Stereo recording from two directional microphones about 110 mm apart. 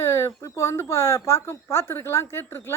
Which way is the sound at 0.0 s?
25° left (ahead or behind).